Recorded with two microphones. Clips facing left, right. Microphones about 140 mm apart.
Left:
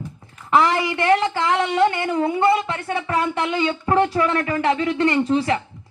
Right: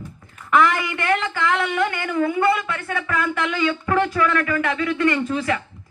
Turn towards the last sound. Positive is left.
turn(degrees=30)  # may be behind; listen again after turning